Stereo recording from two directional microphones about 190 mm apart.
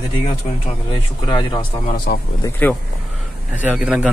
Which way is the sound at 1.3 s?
25° left (ahead or behind).